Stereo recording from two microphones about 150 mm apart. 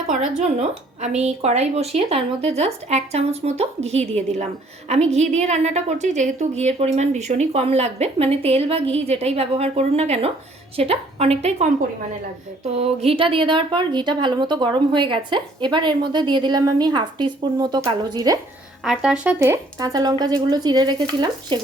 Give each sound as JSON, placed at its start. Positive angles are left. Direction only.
{"t": 0.1, "sound": "a woman's voice", "side_deg": -50}
{"t": 18.9, "sound": "speech", "side_deg": -5}